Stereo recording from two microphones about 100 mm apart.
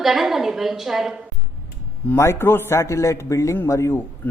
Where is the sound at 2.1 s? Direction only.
25° left (ahead or behind).